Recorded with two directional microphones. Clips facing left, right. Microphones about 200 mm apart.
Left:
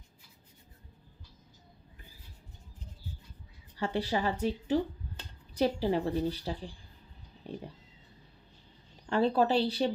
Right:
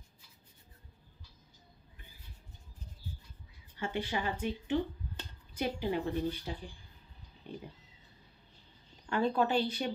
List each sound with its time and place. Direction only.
3.7 s speech: 35° left (ahead or behind)
9.1 s speech: 35° left (ahead or behind)